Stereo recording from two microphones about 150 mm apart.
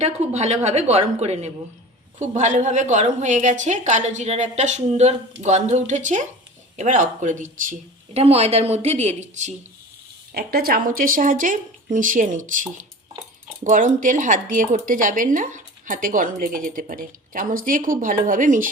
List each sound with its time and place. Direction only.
0.0 s a woman's voice: 45° right (ahead or behind)
8.1 s a woman's voice: 45° right (ahead or behind)
10.3 s speech: 90° right; by 18.7 s 60° right (ahead or behind)